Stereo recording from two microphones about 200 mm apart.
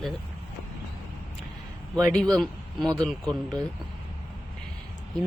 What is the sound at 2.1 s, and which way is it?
Speech, 5° left (ahead or behind).